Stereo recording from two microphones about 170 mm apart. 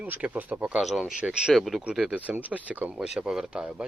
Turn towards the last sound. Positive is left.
turn(degrees=-5)  # may be behind; listen again after turning